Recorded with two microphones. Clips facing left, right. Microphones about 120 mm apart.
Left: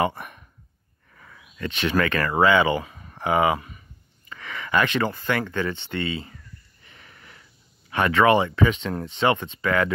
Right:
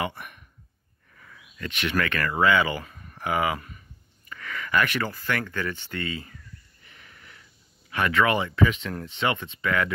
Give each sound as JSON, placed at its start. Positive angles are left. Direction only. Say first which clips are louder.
{"t": 0.0, "sound": "speech", "louder": "left 7 dB", "side_deg": 35}
{"t": 6.9, "sound": "sniff", "louder": "left 2 dB", "side_deg": 35}
{"t": 7.9, "sound": "speech", "louder": "left 5 dB", "side_deg": 30}